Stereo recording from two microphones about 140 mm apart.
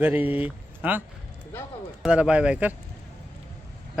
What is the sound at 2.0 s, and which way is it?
Speech, 5° right (ahead or behind).